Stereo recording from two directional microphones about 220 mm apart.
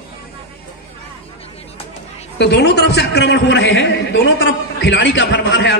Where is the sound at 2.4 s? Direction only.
50° left (ahead or behind).